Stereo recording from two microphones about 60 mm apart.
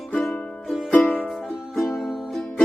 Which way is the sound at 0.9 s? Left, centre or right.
Left.